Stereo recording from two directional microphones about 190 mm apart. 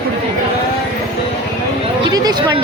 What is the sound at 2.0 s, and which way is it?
Speech, 20° right (ahead or behind).